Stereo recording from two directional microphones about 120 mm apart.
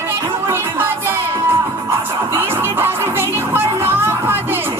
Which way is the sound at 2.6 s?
20° right (ahead or behind).